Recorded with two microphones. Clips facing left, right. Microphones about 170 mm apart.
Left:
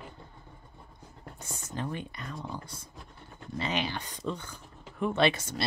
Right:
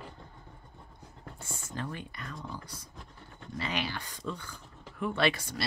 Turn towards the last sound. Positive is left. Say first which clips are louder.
# left 3 dB
turn(degrees=20)  # may be behind; listen again after turning